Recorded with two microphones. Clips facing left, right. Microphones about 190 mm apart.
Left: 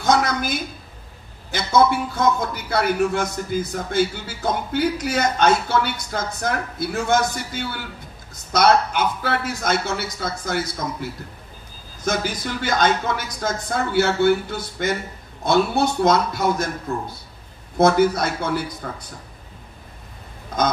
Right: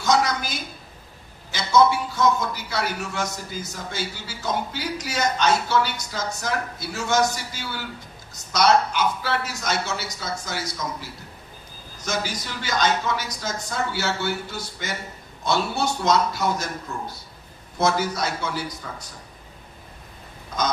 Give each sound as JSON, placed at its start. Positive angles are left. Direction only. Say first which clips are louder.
{"t": 0.0, "sound": "a woman's voice", "louder": "left 2 dB", "side_deg": 55}
{"t": 17.7, "sound": "a man's voice", "louder": "left 7 dB", "side_deg": 55}
{"t": 20.5, "sound": "quack", "louder": "left 4 dB", "side_deg": 55}